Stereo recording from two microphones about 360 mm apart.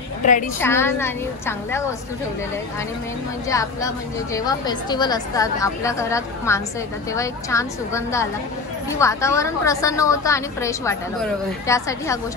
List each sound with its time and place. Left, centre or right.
0.2 s a woman's voice: left
0.6 s a woman's voice: centre
3.4 s a woman's voice: centre